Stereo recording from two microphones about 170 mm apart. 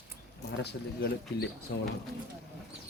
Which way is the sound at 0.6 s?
75° left (ahead or behind).